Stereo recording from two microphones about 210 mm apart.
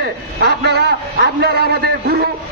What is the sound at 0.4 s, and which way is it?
A man's voice, 50° right (ahead or behind).